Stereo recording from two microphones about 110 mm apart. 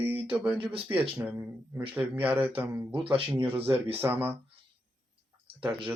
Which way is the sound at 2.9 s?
55° right (ahead or behind).